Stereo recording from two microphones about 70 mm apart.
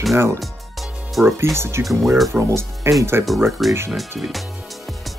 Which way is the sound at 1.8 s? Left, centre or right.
Centre.